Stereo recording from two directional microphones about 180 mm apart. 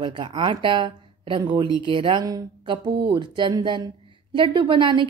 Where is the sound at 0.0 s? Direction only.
25° right (ahead or behind).